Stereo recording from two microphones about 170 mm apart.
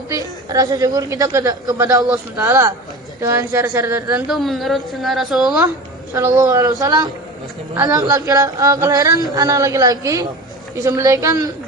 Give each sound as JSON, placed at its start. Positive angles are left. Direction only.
{"t": 0.1, "sound": "a woman's voice", "side_deg": -20}
{"t": 4.3, "sound": "a woman's voice", "side_deg": 0}
{"t": 6.1, "sound": "a woman's voice", "side_deg": -20}